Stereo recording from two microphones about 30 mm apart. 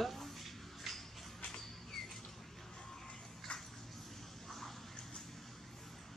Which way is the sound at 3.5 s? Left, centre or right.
Left.